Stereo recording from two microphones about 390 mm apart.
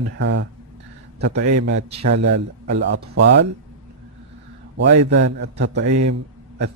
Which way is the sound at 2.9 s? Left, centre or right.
Right.